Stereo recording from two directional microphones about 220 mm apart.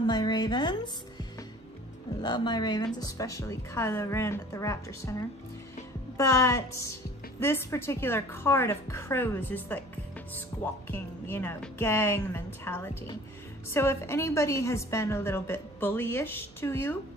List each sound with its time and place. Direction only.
0.0 s speech: 20° left (ahead or behind)
2.2 s a woman's voice: 20° left (ahead or behind)
6.1 s a woman's voice: 15° left (ahead or behind)